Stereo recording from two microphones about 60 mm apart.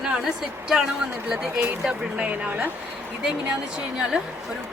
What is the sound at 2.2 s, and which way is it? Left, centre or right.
Speech, right.